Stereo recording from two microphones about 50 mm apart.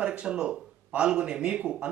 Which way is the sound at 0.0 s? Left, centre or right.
Centre.